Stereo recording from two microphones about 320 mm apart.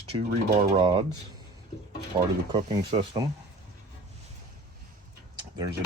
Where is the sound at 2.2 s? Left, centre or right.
Centre.